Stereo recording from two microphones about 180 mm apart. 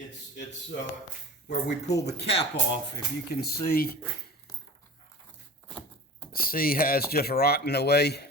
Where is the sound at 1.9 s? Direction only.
70° left (ahead or behind).